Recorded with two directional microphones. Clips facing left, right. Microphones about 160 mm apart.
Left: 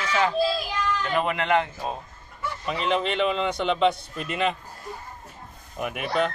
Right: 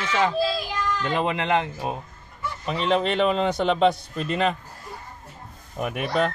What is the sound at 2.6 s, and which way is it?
A man's voice, 35° right (ahead or behind).